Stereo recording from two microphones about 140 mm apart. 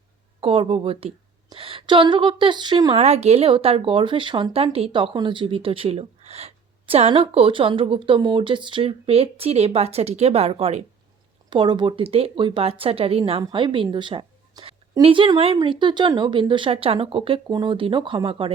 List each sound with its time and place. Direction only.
0.3 s a woman's voice: 40° right (ahead or behind)
3.0 s a woman's voice: 50° right (ahead or behind)
11.5 s a woman's voice: 35° right (ahead or behind)